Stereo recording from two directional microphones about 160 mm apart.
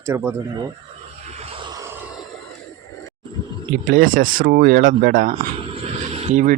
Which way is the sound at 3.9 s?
60° right (ahead or behind).